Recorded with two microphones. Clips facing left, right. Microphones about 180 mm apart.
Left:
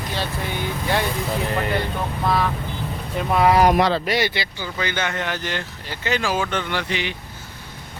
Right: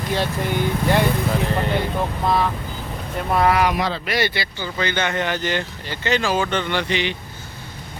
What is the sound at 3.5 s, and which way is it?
Speech, 40° left (ahead or behind).